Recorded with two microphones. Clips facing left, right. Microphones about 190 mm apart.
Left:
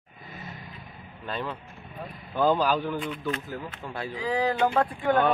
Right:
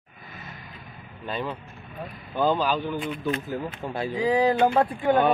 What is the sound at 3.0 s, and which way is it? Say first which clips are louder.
Speech: right 3 dB; 20° right (ahead or behind).